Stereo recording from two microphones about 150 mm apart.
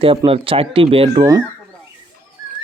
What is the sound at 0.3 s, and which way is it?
Speech, 40° right (ahead or behind).